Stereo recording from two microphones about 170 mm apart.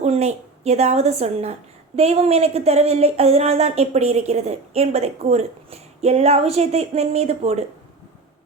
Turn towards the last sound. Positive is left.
turn(degrees=-40)  # may be behind; listen again after turning